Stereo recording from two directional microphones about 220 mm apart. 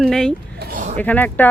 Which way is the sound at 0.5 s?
40° right (ahead or behind).